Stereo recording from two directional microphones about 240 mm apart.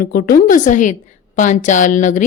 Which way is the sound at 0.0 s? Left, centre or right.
Left.